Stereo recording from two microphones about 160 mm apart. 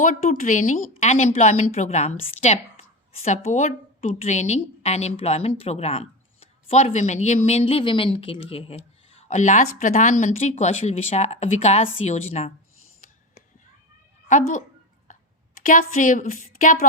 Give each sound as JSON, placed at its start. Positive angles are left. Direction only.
{"t": 0.0, "sound": "a woman's voice", "side_deg": 50}
{"t": 14.3, "sound": "speech", "side_deg": 50}
{"t": 15.6, "sound": "a woman's voice", "side_deg": 55}